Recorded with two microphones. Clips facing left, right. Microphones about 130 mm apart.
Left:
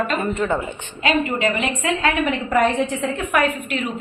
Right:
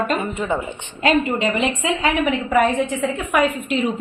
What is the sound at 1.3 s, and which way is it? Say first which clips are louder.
Speech: right 1 dB; 25° right (ahead or behind).